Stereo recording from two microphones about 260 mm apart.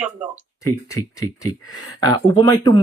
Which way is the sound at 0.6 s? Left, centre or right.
Centre.